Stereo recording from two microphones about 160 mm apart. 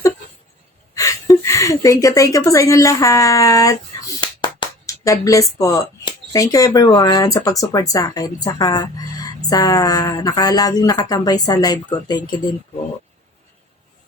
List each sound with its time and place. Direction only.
0.9 s a woman's voice: 20° left (ahead or behind)